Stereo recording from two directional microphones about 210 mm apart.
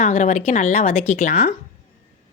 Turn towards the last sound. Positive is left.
turn(degrees=35)  # may be behind; listen again after turning